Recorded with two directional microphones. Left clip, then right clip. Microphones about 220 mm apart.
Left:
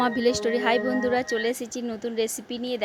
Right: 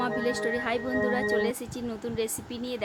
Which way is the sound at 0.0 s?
30° left (ahead or behind).